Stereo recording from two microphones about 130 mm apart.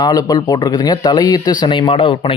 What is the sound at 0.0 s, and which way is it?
Speech, 30° left (ahead or behind).